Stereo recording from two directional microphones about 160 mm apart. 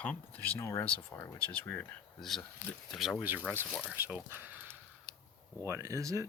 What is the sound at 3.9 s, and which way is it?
Speech, 15° right (ahead or behind).